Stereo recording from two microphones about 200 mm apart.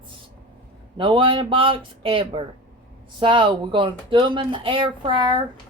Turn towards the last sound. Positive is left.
turn(degrees=-25)  # may be behind; listen again after turning